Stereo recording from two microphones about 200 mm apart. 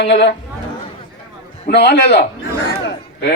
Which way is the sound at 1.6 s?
55° left (ahead or behind).